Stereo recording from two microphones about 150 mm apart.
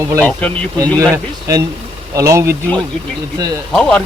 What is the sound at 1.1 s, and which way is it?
Speech, 20° right (ahead or behind).